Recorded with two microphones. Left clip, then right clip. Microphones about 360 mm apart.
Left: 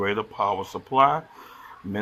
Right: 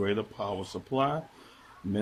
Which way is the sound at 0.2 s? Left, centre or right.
Left.